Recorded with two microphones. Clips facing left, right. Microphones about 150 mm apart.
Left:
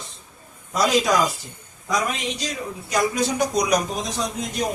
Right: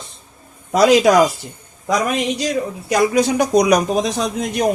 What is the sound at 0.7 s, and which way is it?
Speech, 70° right (ahead or behind).